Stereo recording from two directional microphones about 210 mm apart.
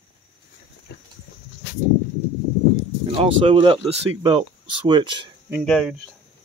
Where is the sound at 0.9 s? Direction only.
55° left (ahead or behind).